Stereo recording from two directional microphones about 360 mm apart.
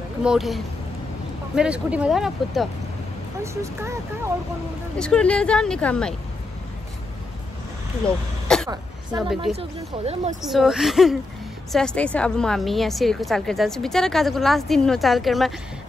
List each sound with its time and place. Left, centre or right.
0.2 s a woman's voice: centre
8.0 s a woman's voice: centre
8.5 s throat clearing: centre
9.4 s speech: centre
10.4 s a woman's voice: centre